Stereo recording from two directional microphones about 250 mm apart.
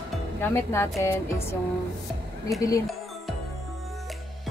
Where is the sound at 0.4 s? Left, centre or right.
Centre.